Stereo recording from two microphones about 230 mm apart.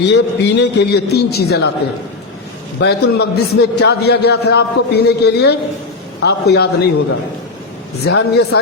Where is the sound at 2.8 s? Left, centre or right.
Left.